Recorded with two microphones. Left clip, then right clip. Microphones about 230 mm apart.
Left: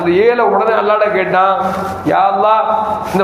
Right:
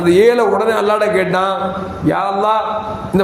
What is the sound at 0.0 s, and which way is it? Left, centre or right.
A man's voice, right.